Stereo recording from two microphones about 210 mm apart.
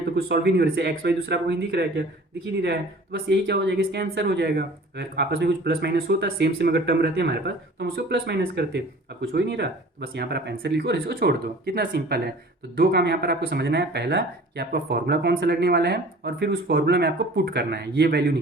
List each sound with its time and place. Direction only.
0.2 s speech: 50° right (ahead or behind)